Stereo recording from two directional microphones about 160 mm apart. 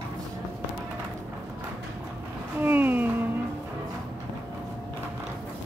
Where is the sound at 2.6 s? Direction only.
10° right (ahead or behind).